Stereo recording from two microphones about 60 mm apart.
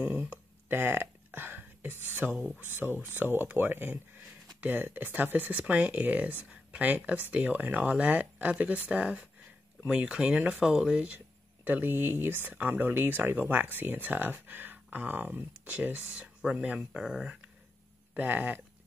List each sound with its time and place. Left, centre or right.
0.2 s a sound: right
2.4 s speech: right; by 11.1 s centre
11.1 s speech: right; by 17.4 s centre
18.1 s speech: right